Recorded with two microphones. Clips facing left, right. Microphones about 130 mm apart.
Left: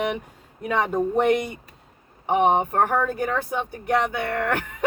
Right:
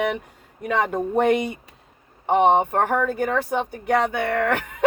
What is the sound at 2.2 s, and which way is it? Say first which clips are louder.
Speech: right 2 dB; 65° right (ahead or behind).